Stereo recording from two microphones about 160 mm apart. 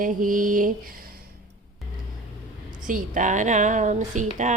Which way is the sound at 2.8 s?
55° right (ahead or behind).